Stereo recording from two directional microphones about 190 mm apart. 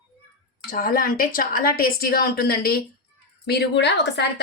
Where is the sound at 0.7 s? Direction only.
50° left (ahead or behind).